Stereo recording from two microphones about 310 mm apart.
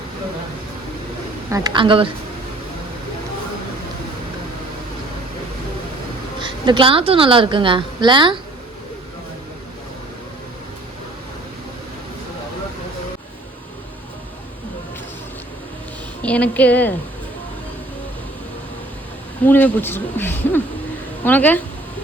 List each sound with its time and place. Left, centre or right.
1.5 s a woman's voice: centre
6.4 s a woman's voice: centre
16.2 s a woman's voice: centre
19.5 s a woman's voice: centre